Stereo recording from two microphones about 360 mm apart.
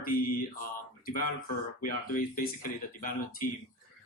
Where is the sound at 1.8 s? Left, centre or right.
Left.